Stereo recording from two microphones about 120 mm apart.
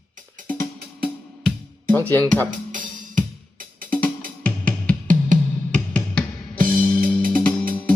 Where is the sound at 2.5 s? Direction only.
90° right.